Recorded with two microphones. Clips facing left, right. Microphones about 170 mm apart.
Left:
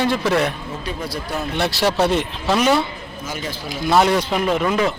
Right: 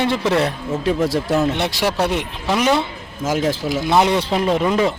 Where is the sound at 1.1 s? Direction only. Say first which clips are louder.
Right 8 dB; 90° right.